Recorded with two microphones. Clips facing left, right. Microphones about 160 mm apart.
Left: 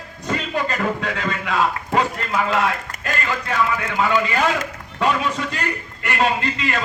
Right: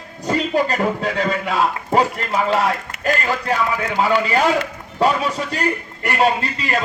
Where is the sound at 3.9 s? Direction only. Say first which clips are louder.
Right 3 dB; 35° right (ahead or behind).